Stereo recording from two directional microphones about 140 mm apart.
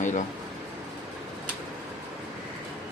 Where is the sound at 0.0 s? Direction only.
65° left (ahead or behind).